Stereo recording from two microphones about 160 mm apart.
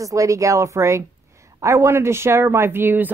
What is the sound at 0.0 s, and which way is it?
A woman's voice, 20° right (ahead or behind).